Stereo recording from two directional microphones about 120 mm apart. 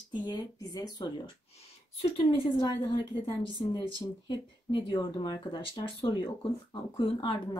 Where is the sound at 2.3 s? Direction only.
40° left (ahead or behind).